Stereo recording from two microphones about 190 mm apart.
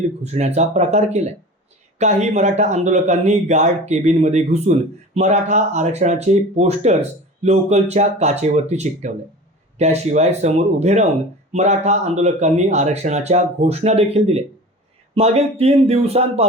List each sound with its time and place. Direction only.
0.2 s speech: 35° right (ahead or behind)